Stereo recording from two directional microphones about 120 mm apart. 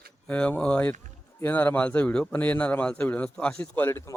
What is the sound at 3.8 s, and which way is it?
Speech, 20° left (ahead or behind).